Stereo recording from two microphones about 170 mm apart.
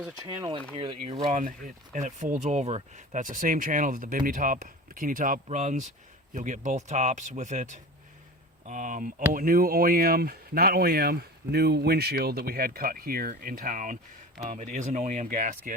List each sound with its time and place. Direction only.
0.3 s speech: 25° right (ahead or behind); by 15.7 s 50° right (ahead or behind)